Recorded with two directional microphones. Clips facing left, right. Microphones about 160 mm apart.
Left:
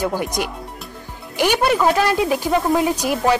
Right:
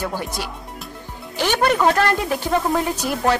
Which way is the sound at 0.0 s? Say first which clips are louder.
Left 4 dB; 15° left (ahead or behind).